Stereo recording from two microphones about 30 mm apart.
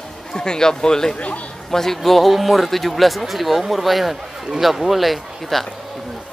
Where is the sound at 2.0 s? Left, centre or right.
Centre.